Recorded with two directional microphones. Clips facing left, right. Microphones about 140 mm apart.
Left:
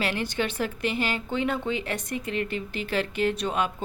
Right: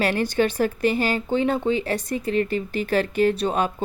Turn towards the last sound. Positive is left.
turn(degrees=-40)  # may be behind; listen again after turning